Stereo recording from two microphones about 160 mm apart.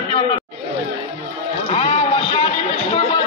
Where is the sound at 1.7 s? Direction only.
35° left (ahead or behind).